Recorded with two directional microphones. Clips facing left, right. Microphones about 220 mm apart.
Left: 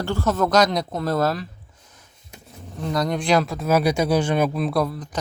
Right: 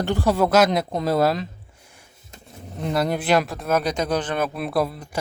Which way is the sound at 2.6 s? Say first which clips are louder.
Right 1 dB; 20° right (ahead or behind).